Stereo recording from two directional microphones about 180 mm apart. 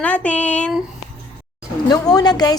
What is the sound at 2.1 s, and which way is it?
Speech, 20° left (ahead or behind).